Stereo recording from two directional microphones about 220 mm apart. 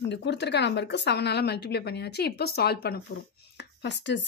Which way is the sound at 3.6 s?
50° left (ahead or behind).